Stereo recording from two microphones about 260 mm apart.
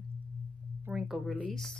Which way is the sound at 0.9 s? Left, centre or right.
Centre.